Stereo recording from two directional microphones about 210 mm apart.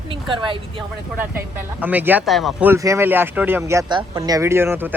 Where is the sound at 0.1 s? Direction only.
25° right (ahead or behind).